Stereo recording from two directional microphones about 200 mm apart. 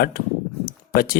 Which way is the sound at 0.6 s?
45° left (ahead or behind).